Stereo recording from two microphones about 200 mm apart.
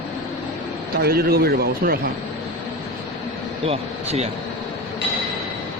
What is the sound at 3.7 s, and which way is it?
Speech, 30° right (ahead or behind).